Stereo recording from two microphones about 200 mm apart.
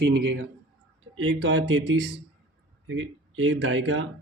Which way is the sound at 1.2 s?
70° right (ahead or behind).